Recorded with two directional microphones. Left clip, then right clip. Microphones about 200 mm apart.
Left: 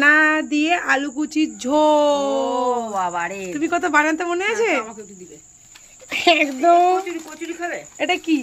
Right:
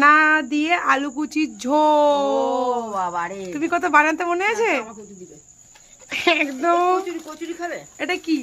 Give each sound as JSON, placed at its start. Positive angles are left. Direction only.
{"t": 0.0, "sound": "speech", "side_deg": 0}
{"t": 2.7, "sound": "speech", "side_deg": -5}
{"t": 6.0, "sound": "speech", "side_deg": 5}
{"t": 7.3, "sound": "speech", "side_deg": -25}
{"t": 8.0, "sound": "speech", "side_deg": 10}